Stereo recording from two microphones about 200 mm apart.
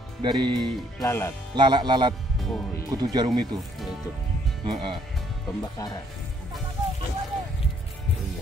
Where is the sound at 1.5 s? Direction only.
25° right (ahead or behind).